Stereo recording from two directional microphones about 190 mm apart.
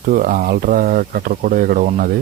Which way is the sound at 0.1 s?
45° right (ahead or behind).